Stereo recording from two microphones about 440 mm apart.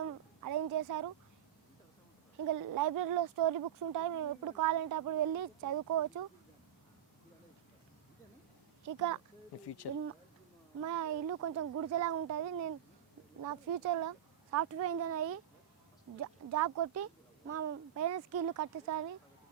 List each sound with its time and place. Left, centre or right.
0.4 s a sound: right
2.5 s speech: right
8.8 s a child's voice: right
9.6 s speech: left
10.8 s speech: right